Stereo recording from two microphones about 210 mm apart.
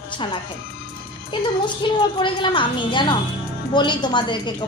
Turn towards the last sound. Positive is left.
turn(degrees=20)  # may be behind; listen again after turning